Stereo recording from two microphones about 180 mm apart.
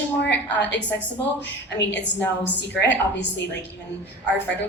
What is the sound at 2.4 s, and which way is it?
A woman's voice, 75° left (ahead or behind).